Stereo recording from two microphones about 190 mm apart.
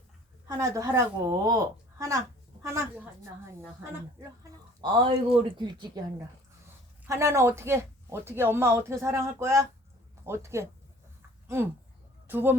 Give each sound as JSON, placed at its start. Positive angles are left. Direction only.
{"t": 0.4, "sound": "speech", "side_deg": -15}
{"t": 4.8, "sound": "speech", "side_deg": -30}
{"t": 7.0, "sound": "speech", "side_deg": -15}